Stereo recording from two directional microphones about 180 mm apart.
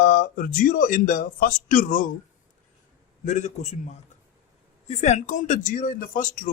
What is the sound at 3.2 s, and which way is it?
A man's voice, 40° left (ahead or behind).